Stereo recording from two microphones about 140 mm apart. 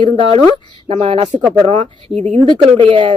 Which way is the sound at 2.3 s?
35° right (ahead or behind).